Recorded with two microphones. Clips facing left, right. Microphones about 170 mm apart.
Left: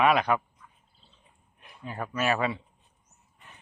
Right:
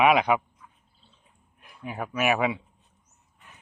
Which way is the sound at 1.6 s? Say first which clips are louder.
Right 2 dB; 5° right (ahead or behind).